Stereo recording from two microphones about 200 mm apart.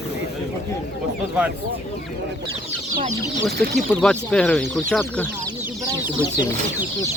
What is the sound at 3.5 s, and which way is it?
Speech, 5° left (ahead or behind).